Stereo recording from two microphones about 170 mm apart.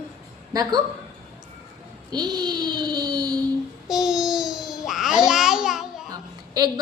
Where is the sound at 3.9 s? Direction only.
5° right (ahead or behind).